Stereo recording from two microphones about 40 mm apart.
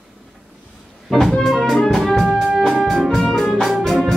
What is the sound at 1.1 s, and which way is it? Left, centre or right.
Music, centre.